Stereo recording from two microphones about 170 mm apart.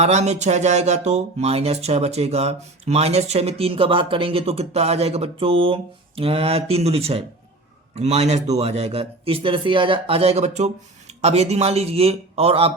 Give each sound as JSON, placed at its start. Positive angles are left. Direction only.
{"t": 0.0, "sound": "speech", "side_deg": -40}